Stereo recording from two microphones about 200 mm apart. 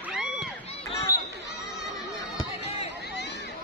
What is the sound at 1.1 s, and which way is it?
Basketball bounce, 15° left (ahead or behind).